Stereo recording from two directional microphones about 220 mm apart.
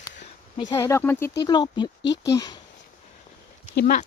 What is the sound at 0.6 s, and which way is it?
Speech, 15° left (ahead or behind).